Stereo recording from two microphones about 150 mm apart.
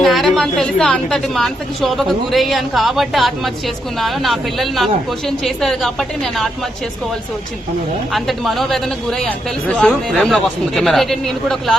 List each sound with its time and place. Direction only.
0.0 s speech: centre (ahead or behind)
8.1 s speech: centre (ahead or behind)